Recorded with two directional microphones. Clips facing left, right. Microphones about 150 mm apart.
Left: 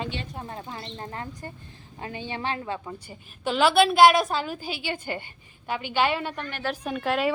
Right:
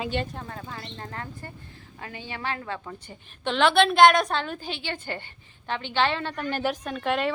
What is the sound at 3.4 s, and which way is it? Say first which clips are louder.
Speech: left 1 dB; 5° left (ahead or behind).